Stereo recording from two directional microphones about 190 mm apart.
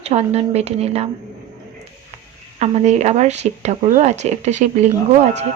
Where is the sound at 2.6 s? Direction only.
35° right (ahead or behind).